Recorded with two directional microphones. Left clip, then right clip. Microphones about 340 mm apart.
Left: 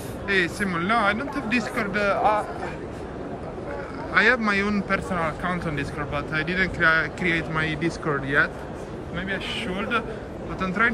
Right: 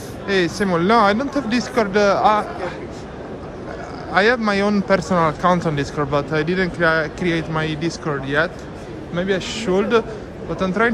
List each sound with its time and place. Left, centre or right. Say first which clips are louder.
0.3 s speech: right 5 dB; centre
4.1 s speech: right 3 dB; centre